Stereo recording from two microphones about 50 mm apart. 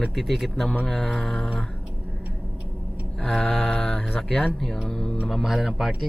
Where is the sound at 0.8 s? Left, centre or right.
Centre.